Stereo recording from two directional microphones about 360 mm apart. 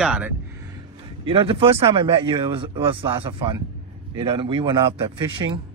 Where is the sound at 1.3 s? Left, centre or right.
Centre.